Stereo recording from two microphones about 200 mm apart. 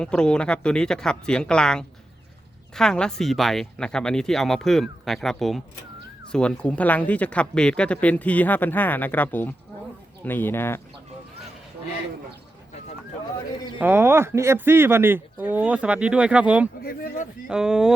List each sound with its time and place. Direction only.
0.0 s speech: 5° left (ahead or behind)
13.7 s speech: 10° right (ahead or behind)
16.8 s speech: 45° left (ahead or behind)
17.5 s speech: 5° right (ahead or behind)